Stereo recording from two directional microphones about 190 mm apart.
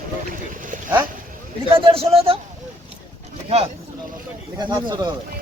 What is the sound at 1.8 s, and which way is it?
Speech, 30° right (ahead or behind).